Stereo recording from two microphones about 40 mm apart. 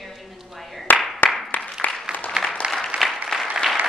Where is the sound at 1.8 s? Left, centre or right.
Left.